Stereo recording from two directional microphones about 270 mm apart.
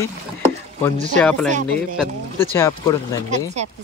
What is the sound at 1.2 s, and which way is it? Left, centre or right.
Speech, centre.